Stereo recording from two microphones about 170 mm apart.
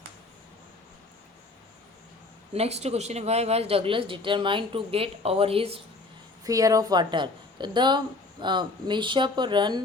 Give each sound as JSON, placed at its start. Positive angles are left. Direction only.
{"t": 2.5, "sound": "speech", "side_deg": -40}
{"t": 6.4, "sound": "speech", "side_deg": -20}